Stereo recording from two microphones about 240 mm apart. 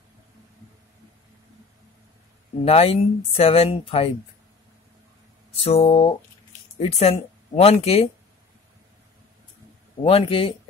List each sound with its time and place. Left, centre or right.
2.6 s speech: left
5.6 s speech: left
10.0 s speech: left